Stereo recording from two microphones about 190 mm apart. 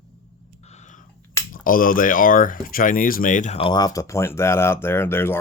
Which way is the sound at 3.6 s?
25° left (ahead or behind).